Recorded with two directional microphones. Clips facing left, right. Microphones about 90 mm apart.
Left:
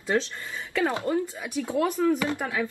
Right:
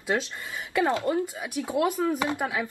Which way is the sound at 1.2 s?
10° right (ahead or behind).